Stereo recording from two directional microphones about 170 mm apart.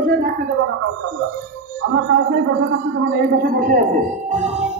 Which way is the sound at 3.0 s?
55° right (ahead or behind).